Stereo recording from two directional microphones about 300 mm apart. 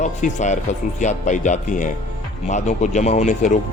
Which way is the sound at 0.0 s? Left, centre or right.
Left.